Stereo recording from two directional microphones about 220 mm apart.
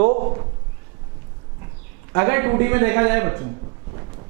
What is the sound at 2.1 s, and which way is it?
A man's voice, 10° right (ahead or behind).